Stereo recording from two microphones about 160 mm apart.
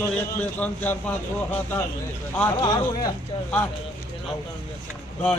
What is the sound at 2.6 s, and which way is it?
Speech, 25° left (ahead or behind).